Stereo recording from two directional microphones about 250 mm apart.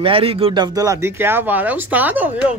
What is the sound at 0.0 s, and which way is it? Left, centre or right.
A child's voice, right.